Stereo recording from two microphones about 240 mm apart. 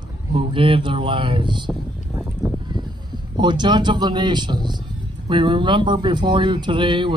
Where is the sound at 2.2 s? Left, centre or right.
Centre.